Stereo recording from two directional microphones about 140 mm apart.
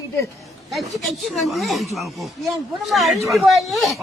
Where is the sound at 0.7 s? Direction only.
Centre (ahead or behind).